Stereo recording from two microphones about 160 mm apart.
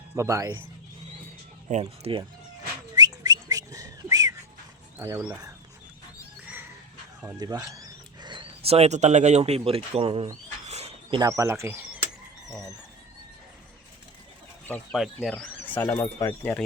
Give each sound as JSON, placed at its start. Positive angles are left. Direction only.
{"t": 0.2, "sound": "speech", "side_deg": -20}
{"t": 1.6, "sound": "speech", "side_deg": -35}
{"t": 2.9, "sound": "whistling", "side_deg": -25}
{"t": 4.9, "sound": "speech", "side_deg": -20}
{"t": 6.1, "sound": "a sound", "side_deg": -10}
{"t": 7.3, "sound": "speech", "side_deg": -25}
{"t": 10.7, "sound": "a sound", "side_deg": -40}
{"t": 11.2, "sound": "speech", "side_deg": -20}
{"t": 14.9, "sound": "speech", "side_deg": 0}